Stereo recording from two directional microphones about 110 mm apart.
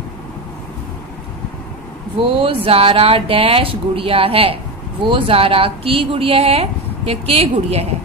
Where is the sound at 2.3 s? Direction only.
55° right (ahead or behind).